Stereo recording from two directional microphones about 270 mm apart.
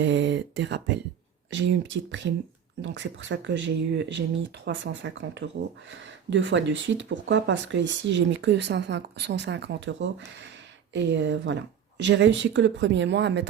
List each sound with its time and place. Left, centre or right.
0.0 s speech: right